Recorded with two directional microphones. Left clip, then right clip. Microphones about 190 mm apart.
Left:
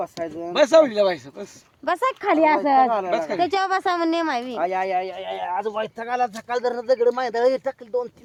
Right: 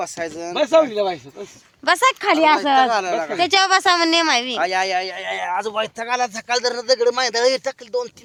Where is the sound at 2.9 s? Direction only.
10° left (ahead or behind).